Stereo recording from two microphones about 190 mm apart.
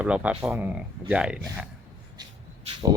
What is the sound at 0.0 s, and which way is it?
Speech, 5° right (ahead or behind).